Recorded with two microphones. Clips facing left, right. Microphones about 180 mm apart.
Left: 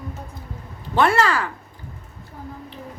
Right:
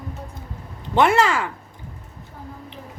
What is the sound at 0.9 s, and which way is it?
Speech, 20° right (ahead or behind).